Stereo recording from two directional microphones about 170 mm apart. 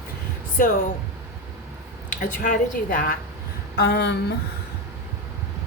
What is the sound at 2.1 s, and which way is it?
A woman's voice, 50° left (ahead or behind).